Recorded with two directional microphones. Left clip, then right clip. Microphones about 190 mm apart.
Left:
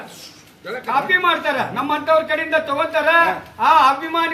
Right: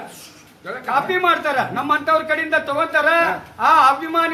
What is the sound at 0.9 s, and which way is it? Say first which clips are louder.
Speech: left 1 dB; 15° right (ahead or behind).